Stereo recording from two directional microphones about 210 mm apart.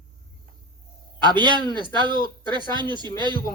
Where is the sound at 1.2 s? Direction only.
20° right (ahead or behind).